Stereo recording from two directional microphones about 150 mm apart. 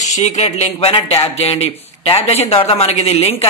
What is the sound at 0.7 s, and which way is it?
Speech, 35° left (ahead or behind).